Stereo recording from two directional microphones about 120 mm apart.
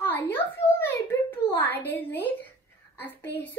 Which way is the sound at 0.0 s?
15° left (ahead or behind).